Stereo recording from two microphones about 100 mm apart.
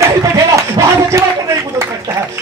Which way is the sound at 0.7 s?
30° right (ahead or behind).